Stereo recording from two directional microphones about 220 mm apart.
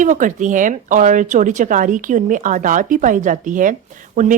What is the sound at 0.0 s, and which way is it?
Speech, 35° right (ahead or behind).